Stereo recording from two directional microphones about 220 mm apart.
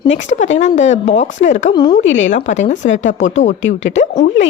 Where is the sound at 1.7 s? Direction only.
20° left (ahead or behind).